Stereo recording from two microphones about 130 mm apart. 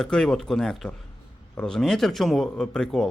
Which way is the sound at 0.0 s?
5° left (ahead or behind).